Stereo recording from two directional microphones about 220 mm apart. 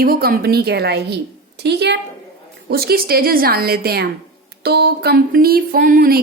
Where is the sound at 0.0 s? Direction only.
40° right (ahead or behind).